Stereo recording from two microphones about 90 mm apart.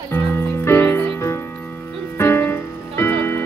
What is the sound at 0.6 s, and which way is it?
Music, 30° left (ahead or behind).